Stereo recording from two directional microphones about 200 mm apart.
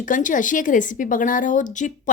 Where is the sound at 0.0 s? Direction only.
40° left (ahead or behind).